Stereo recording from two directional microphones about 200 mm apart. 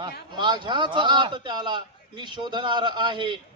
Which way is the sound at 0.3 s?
20° right (ahead or behind).